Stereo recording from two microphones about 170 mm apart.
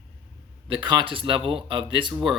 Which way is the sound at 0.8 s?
25° right (ahead or behind).